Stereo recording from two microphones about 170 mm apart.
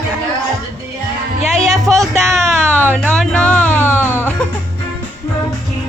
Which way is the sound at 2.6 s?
15° right (ahead or behind).